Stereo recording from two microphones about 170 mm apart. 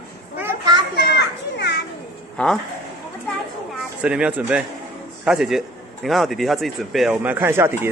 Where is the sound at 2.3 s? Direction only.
5° left (ahead or behind).